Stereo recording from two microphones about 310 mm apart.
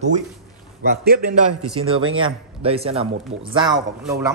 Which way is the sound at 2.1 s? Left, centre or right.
Centre.